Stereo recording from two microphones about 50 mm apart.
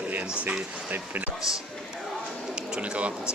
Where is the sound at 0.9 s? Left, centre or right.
Right.